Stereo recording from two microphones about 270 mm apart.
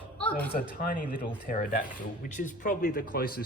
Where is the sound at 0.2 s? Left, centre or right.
Centre.